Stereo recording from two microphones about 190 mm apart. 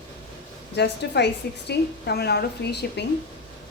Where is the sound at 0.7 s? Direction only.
65° left (ahead or behind).